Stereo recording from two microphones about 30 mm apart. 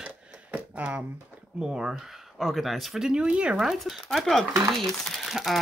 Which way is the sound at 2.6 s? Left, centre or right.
Centre.